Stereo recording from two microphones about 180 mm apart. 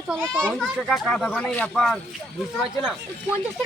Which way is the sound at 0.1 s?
10° right (ahead or behind).